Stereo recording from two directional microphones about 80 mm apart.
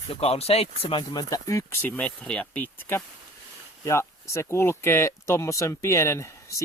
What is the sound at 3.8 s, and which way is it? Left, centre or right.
Speech, left.